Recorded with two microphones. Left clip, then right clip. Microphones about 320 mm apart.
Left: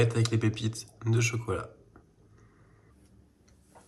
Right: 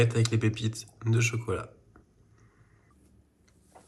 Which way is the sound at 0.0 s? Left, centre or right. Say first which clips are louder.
Right 1 dB; centre.